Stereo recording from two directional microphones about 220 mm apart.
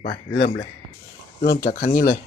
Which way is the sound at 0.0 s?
50° left (ahead or behind).